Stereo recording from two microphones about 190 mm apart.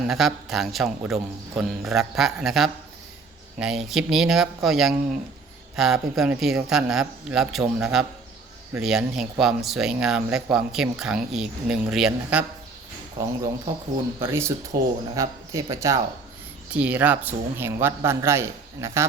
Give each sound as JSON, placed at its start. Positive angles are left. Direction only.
{"t": 0.1, "sound": "speech", "side_deg": 0}
{"t": 14.2, "sound": "speech", "side_deg": -15}